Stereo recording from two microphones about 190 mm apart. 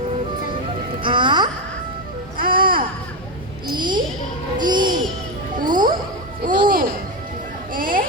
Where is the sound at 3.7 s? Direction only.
25° right (ahead or behind).